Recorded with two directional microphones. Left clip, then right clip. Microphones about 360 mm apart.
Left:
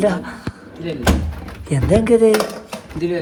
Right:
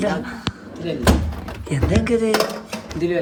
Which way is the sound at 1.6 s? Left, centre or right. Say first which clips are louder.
Left 6 dB; centre.